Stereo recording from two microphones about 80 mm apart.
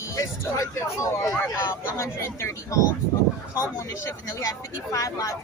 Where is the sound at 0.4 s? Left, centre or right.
Left.